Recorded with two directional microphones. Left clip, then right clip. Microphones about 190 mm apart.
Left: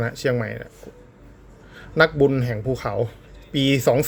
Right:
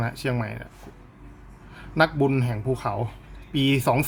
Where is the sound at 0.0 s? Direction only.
15° left (ahead or behind).